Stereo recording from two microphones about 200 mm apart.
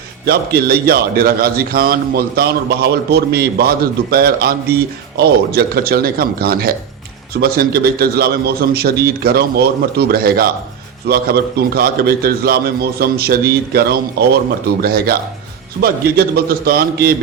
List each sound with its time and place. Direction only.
0.3 s a man's voice: 50° right (ahead or behind)